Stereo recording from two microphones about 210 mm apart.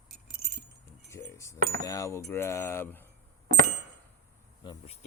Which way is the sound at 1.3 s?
15° left (ahead or behind).